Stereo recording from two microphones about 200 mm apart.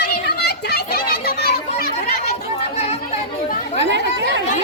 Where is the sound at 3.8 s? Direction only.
60° right (ahead or behind).